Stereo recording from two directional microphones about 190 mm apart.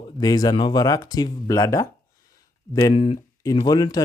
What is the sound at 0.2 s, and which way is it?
Speech, 20° left (ahead or behind).